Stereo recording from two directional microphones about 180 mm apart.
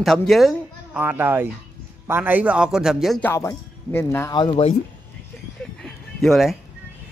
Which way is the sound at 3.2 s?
10° left (ahead or behind).